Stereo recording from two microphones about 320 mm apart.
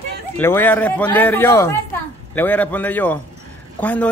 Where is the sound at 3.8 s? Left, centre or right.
Centre.